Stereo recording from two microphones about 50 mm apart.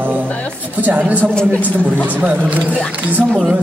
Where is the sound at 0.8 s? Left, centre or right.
Right.